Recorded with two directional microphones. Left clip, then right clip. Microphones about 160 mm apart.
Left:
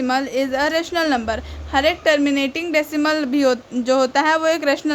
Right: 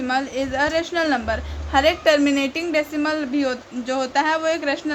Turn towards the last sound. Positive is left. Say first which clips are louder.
# left 4 dB
turn(degrees=50)  # may be behind; listen again after turning